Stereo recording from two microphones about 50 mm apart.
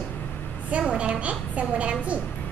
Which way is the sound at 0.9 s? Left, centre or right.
Right.